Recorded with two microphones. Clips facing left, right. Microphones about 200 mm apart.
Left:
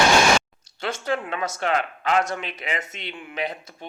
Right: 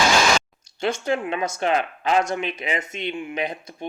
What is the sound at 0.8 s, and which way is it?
Speech, 15° right (ahead or behind).